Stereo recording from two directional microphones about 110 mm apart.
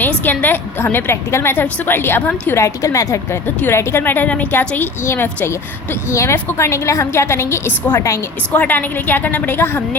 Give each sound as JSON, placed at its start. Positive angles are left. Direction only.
{"t": 0.0, "sound": "a woman's voice", "side_deg": 15}
{"t": 2.6, "sound": "a woman's voice", "side_deg": 30}